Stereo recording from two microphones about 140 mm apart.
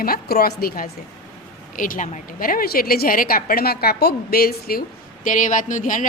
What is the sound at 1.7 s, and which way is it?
A woman's voice, 75° left (ahead or behind).